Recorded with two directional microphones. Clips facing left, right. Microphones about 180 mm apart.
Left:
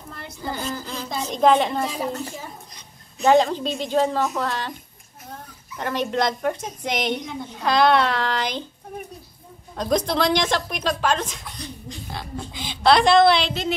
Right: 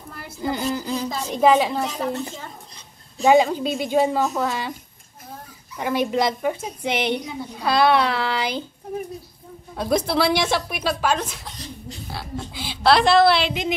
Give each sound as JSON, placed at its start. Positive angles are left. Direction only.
{"t": 0.4, "sound": "a sound", "side_deg": -15}
{"t": 1.0, "sound": "a woman's voice", "side_deg": -5}
{"t": 3.3, "sound": "speech", "side_deg": -10}
{"t": 5.8, "sound": "speech", "side_deg": -10}
{"t": 9.8, "sound": "a woman's voice", "side_deg": -5}